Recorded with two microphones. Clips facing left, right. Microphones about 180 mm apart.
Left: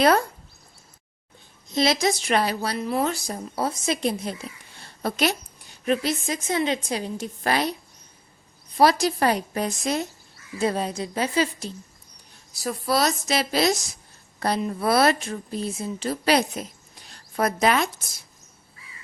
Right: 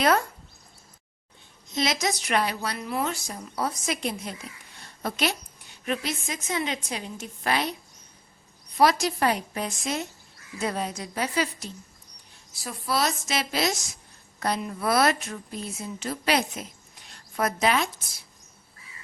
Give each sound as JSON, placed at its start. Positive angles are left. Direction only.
{"t": 0.0, "sound": "a woman's voice", "side_deg": 35}
{"t": 1.7, "sound": "a woman's voice", "side_deg": 30}
{"t": 8.8, "sound": "a woman's voice", "side_deg": 35}
{"t": 12.6, "sound": "a woman's voice", "side_deg": 40}
{"t": 17.1, "sound": "a sound", "side_deg": 35}